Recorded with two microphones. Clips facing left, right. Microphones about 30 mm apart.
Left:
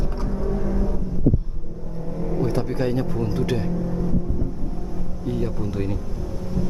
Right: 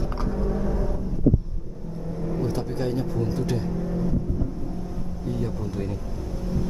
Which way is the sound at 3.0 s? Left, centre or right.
Left.